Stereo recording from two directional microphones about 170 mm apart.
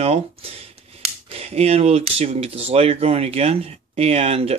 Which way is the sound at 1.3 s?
35° right (ahead or behind).